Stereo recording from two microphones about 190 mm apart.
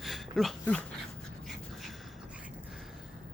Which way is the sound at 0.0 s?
Centre (ahead or behind).